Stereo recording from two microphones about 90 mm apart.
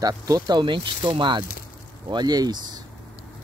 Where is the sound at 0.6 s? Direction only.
65° right (ahead or behind).